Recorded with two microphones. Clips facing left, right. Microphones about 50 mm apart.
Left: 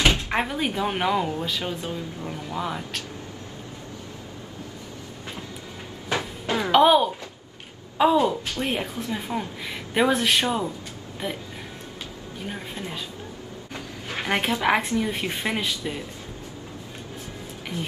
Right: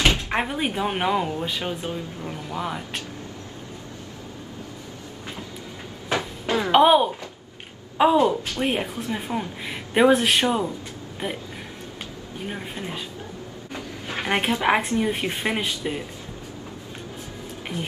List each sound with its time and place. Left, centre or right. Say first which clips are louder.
0.0 s speech: even; centre
1.4 s speech: right 1 dB; centre
6.0 s a sound: right 2 dB; centre
6.7 s speech: right 1 dB; centre
12.4 s speech: right 1 dB; centre
13.7 s a sound: right 2 dB; centre
15.0 s speech: right 2 dB; centre